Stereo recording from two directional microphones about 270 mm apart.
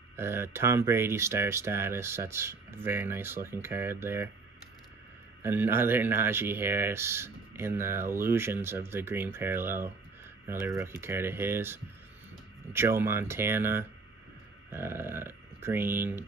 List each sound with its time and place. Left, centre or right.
0.1 s speech: centre
5.4 s speech: centre